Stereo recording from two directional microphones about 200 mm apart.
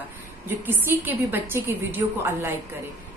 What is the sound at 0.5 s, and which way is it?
A woman's voice, 10° right (ahead or behind).